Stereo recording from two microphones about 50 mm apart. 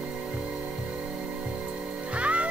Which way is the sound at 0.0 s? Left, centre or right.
Right.